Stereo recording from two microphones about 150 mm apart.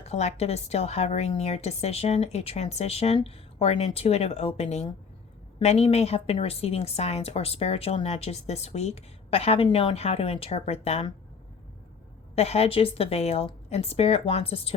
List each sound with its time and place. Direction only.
0.0 s a woman's voice: 45° left (ahead or behind)
12.3 s a woman's voice: 45° left (ahead or behind)